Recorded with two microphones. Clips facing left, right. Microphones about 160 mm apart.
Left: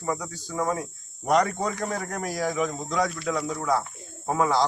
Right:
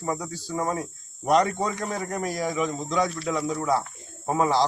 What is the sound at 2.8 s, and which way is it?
Speech, 30° right (ahead or behind).